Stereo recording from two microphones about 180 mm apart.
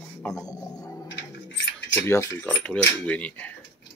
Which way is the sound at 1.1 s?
85° left.